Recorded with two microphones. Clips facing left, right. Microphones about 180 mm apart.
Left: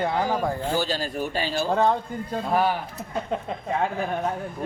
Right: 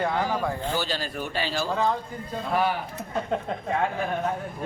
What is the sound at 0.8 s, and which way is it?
A man's voice, 45° left (ahead or behind).